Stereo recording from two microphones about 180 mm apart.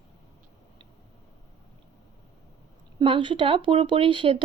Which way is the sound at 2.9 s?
30° right (ahead or behind).